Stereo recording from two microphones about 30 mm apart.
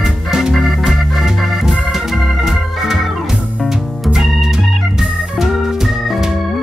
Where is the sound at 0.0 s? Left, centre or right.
Centre.